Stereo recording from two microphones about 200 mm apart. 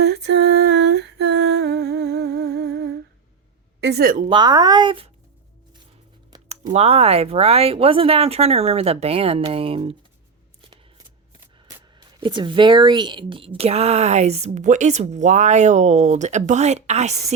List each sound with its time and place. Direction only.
0.0 s a sound: 60° right (ahead or behind)
3.8 s speech: 55° right (ahead or behind)
4.3 s speech: 20° right (ahead or behind)
6.5 s speech: 30° right (ahead or behind)
10.6 s scissors: 20° right (ahead or behind)
11.9 s speech: 25° right (ahead or behind)